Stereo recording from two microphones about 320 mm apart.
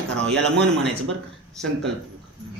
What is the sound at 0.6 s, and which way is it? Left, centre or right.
Speech, right.